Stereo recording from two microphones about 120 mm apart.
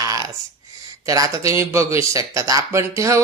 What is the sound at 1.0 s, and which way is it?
A woman's voice, 30° right (ahead or behind).